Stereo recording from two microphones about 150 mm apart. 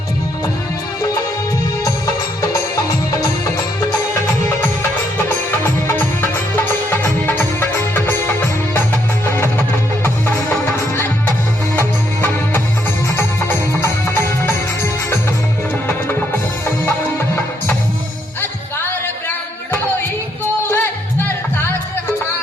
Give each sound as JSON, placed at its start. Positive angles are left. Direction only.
{"t": 1.8, "sound": "music", "side_deg": 20}
{"t": 5.1, "sound": "music", "side_deg": 15}
{"t": 11.8, "sound": "music", "side_deg": 15}
{"t": 20.7, "sound": "music", "side_deg": 15}